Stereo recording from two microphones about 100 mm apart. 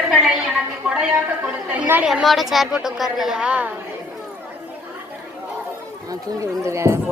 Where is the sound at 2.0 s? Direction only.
5° right (ahead or behind).